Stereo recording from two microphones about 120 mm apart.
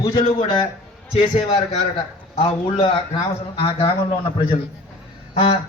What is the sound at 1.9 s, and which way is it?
A man's voice, 50° left (ahead or behind).